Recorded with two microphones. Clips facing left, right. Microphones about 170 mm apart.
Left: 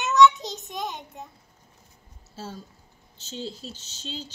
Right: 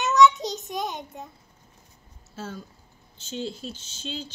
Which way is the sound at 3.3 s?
30° left (ahead or behind).